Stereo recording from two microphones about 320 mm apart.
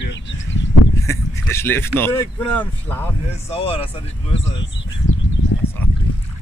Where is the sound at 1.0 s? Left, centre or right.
Centre.